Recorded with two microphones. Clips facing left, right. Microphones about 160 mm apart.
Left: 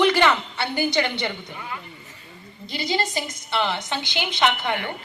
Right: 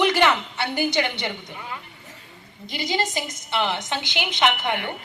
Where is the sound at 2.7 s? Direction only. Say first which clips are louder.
Even; 15° right (ahead or behind).